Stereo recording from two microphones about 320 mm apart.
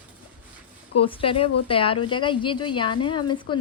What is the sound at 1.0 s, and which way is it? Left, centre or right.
A woman's voice, centre.